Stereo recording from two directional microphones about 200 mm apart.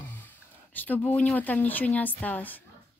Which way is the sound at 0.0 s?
10° left (ahead or behind).